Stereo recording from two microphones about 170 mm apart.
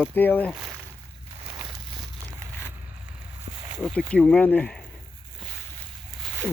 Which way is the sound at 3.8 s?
5° left (ahead or behind).